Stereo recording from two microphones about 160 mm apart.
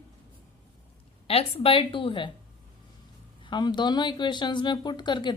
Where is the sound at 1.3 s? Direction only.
40° left (ahead or behind).